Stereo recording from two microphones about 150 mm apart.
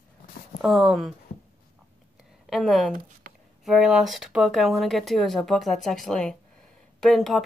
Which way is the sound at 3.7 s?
5° right (ahead or behind).